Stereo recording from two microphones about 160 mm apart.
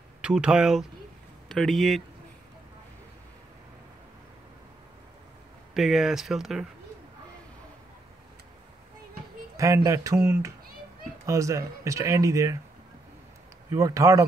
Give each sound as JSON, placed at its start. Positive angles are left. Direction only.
{"t": 0.2, "sound": "speech", "side_deg": -5}
{"t": 5.8, "sound": "speech", "side_deg": 0}
{"t": 9.6, "sound": "speech", "side_deg": -20}
{"t": 13.7, "sound": "speech", "side_deg": -20}